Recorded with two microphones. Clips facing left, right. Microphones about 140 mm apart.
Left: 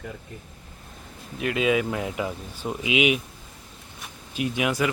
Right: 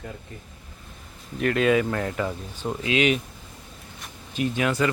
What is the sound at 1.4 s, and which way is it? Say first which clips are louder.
Speech: right 2 dB; 5° left (ahead or behind).